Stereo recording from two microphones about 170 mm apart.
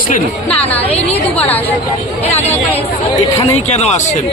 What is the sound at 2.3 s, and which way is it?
A man's voice, 40° left (ahead or behind).